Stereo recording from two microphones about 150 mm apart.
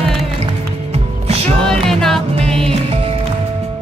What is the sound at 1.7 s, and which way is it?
Music, 5° left (ahead or behind).